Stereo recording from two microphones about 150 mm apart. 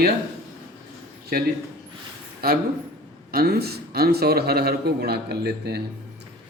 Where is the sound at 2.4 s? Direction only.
90° right.